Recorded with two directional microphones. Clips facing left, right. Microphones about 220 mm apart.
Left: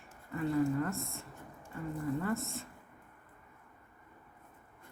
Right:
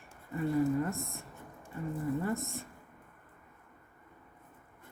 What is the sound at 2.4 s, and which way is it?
Speech, 15° right (ahead or behind).